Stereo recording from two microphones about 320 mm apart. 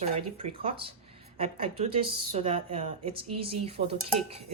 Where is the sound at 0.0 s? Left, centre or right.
Centre.